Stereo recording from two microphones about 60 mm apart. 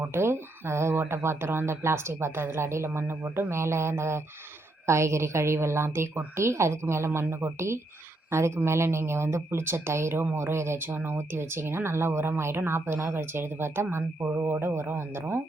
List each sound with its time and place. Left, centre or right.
0.0 s speech: right